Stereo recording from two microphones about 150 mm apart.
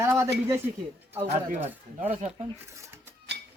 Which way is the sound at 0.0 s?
20° right (ahead or behind).